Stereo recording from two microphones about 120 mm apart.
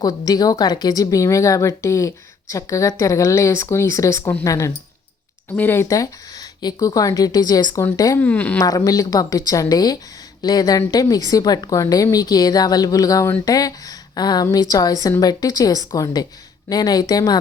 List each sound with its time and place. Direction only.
0.0 s speech: 30° left (ahead or behind)
8.2 s a woman's voice: 15° left (ahead or behind)
8.6 s a woman's voice: 30° left (ahead or behind)